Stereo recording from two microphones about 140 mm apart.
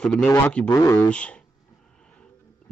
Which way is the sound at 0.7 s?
20° left (ahead or behind).